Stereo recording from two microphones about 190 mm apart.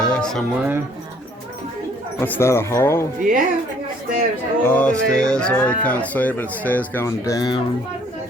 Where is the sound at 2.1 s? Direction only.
10° left (ahead or behind).